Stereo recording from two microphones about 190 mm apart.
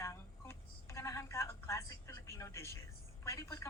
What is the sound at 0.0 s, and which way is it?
Telephone dialing, 15° left (ahead or behind).